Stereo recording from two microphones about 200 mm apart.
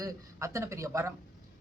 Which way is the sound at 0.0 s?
15° right (ahead or behind).